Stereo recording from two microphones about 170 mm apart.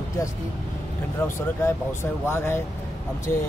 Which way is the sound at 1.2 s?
15° left (ahead or behind).